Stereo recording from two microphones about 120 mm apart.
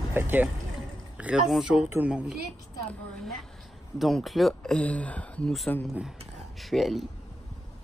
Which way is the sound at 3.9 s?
Centre (ahead or behind).